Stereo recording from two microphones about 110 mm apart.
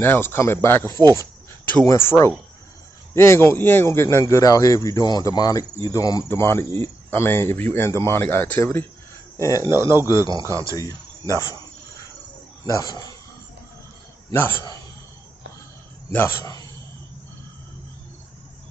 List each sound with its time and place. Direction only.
0.0 s a man's voice: 20° left (ahead or behind)
9.4 s a man's voice: 30° left (ahead or behind)
9.8 s speech: 25° right (ahead or behind)
10.7 s speech: 30° left (ahead or behind)
12.6 s a man's voice: 35° left (ahead or behind)
14.3 s speech: 20° left (ahead or behind)
16.1 s speech: 20° left (ahead or behind)